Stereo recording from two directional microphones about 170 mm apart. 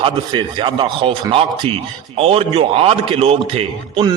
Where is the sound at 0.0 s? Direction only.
30° right (ahead or behind).